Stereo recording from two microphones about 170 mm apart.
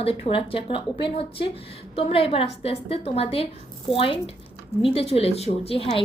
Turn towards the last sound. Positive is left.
turn(degrees=35)  # may be behind; listen again after turning